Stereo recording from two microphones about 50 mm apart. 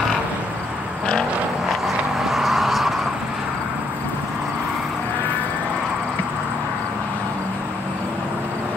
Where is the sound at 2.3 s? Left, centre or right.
Centre.